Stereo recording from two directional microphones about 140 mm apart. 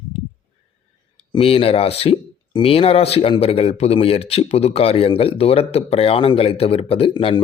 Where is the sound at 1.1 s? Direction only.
40° left (ahead or behind).